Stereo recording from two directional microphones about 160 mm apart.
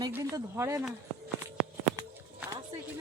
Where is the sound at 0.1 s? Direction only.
20° right (ahead or behind).